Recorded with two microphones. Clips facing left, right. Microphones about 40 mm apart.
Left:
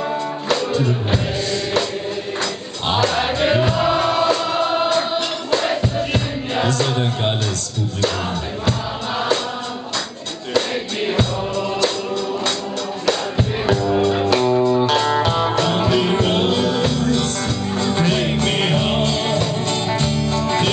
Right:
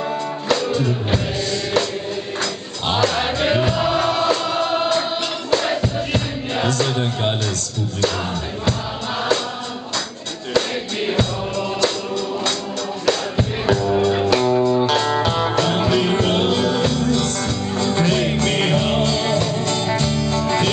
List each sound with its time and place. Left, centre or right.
0.5 s music: centre
2.9 s music: centre
10.5 s music: centre
13.0 s music: centre
17.0 s music: centre